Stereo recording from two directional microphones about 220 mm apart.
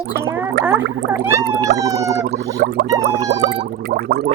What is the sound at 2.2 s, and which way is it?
Gargling, 50° right (ahead or behind).